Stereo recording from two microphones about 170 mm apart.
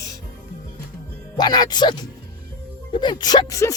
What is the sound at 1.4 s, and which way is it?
Speech, 25° left (ahead or behind).